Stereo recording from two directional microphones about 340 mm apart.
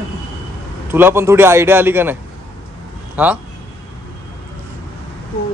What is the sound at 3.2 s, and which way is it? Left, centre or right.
Speech, centre.